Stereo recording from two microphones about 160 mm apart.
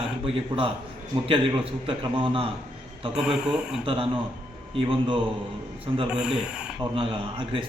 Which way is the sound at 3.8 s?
35° right (ahead or behind).